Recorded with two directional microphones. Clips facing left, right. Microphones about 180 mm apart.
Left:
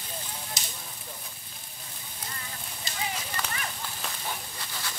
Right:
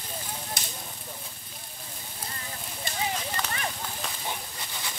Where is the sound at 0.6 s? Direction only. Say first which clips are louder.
Right 2 dB; 60° right (ahead or behind).